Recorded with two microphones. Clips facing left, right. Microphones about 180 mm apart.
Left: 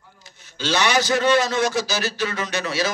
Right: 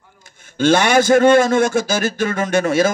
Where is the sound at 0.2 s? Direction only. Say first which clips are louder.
Right 13 dB; 50° right (ahead or behind).